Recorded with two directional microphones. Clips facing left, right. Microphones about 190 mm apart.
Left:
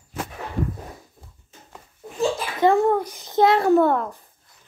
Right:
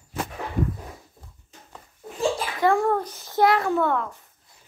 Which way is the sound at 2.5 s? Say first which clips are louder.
Left 4 dB; 20° left (ahead or behind).